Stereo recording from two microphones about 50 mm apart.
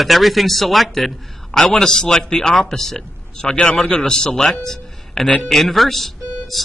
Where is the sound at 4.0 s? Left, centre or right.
Centre.